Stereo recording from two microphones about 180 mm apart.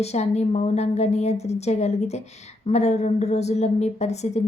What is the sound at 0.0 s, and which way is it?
A woman's voice, 35° left (ahead or behind).